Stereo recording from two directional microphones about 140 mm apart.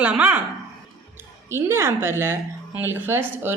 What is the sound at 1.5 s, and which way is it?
A woman's voice, 20° right (ahead or behind).